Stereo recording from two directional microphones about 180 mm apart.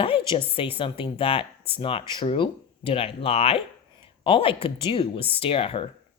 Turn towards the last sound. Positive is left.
turn(degrees=30)  # may be behind; listen again after turning